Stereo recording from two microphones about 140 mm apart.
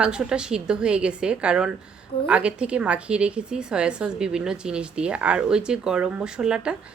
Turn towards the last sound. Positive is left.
turn(degrees=-5)  # may be behind; listen again after turning